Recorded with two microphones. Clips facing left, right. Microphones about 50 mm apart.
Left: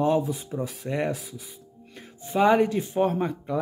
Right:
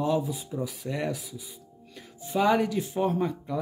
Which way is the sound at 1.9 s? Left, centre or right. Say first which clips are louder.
Left 3 dB; left.